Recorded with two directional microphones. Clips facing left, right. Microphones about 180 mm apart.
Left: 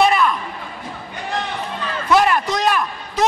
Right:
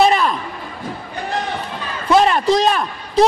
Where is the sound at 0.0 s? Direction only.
30° right (ahead or behind).